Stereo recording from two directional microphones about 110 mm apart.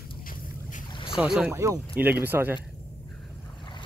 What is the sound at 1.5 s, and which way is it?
Speech, 25° right (ahead or behind).